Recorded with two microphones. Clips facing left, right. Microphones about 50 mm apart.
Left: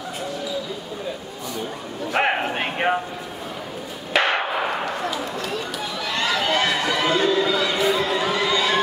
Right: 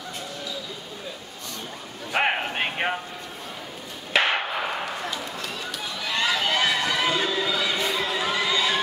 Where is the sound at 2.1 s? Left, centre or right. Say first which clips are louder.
Left 2 dB; centre.